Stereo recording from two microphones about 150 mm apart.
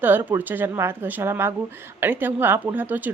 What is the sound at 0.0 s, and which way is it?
Speech, 15° right (ahead or behind).